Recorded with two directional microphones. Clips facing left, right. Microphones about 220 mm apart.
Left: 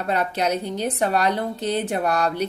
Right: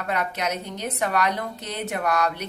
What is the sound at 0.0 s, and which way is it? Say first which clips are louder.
A woman's voice: left 4 dB; 30° left (ahead or behind).